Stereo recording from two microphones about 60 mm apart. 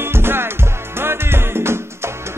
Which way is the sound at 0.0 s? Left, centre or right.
Right.